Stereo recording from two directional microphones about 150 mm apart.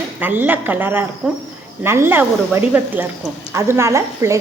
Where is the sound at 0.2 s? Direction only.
10° right (ahead or behind).